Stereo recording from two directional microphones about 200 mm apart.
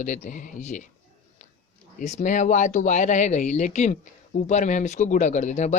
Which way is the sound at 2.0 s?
35° left (ahead or behind).